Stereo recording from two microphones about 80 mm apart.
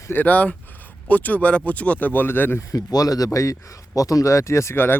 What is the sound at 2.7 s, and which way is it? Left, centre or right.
Speech, left.